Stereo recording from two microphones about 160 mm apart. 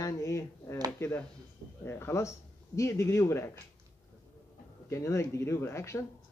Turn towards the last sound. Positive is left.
turn(degrees=15)  # may be behind; listen again after turning